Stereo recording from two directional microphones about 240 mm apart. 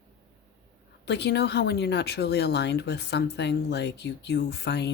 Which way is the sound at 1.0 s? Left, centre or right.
Left.